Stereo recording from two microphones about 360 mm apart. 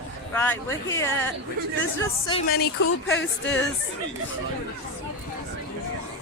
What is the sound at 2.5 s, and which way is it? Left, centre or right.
Speech, left.